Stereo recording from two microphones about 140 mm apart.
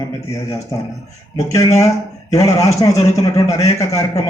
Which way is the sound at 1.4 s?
20° left (ahead or behind).